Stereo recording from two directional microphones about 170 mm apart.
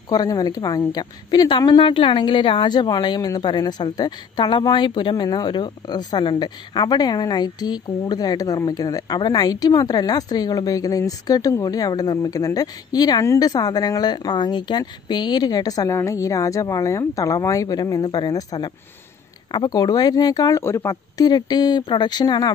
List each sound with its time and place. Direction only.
0.1 s a woman's voice: 20° left (ahead or behind)